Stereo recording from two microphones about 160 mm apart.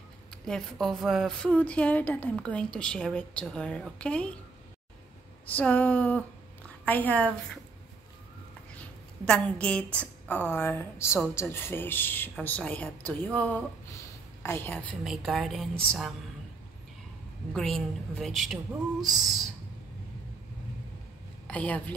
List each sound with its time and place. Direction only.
0.5 s a woman's voice: 5° left (ahead or behind)
5.5 s a woman's voice: 10° left (ahead or behind)
9.2 s a woman's voice: 5° left (ahead or behind)
15.0 s a woman's voice: centre (ahead or behind)
17.6 s a woman's voice: centre (ahead or behind)
21.5 s speech: 10° left (ahead or behind)